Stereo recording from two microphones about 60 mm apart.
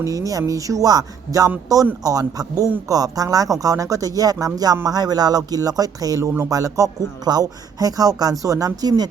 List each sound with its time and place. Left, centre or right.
0.0 s speech: right
7.3 s speech: right